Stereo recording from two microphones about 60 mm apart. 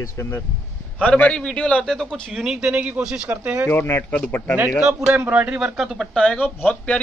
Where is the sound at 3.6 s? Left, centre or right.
Left.